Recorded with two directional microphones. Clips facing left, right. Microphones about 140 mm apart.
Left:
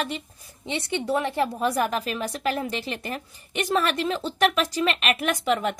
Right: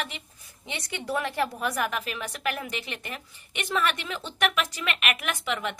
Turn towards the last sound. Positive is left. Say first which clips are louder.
# left 7 dB
turn(degrees=40)  # may be behind; listen again after turning